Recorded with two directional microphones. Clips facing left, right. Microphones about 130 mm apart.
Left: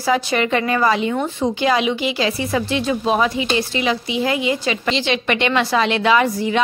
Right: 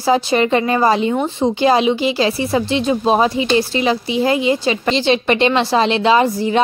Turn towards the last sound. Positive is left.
turn(degrees=-30)  # may be behind; listen again after turning